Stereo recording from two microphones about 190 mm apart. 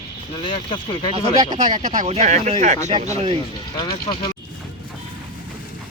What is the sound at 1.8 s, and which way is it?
Speech, 40° right (ahead or behind).